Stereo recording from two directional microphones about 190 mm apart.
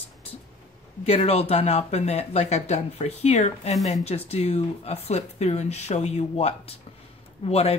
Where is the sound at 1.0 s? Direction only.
30° left (ahead or behind).